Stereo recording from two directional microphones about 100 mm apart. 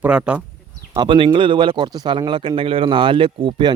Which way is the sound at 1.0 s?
55° right (ahead or behind).